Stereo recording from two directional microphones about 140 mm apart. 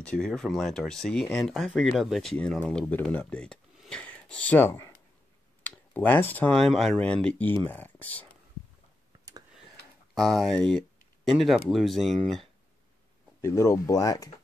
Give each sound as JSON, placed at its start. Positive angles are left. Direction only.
{"t": 0.0, "sound": "speech", "side_deg": 5}
{"t": 10.1, "sound": "speech", "side_deg": 0}
{"t": 13.4, "sound": "speech", "side_deg": 20}